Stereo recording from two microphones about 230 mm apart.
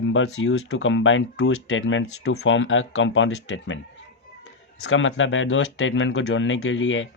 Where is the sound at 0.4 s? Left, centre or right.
Left.